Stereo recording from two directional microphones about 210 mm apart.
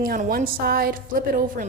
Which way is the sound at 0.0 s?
45° right (ahead or behind).